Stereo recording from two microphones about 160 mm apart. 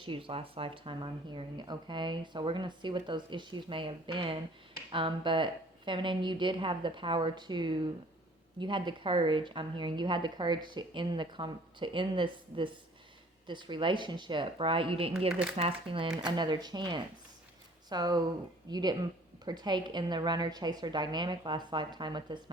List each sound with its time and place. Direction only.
0.0 s speech: 35° right (ahead or behind)